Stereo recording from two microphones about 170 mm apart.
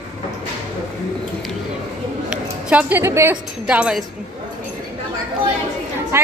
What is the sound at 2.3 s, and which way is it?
A woman's voice, 5° right (ahead or behind).